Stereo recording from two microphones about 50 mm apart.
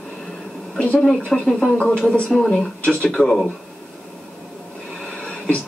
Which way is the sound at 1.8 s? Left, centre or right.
Left.